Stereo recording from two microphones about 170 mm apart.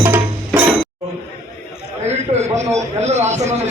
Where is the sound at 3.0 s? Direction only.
40° right (ahead or behind).